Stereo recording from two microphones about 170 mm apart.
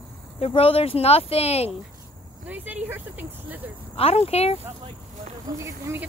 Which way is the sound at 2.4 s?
10° right (ahead or behind).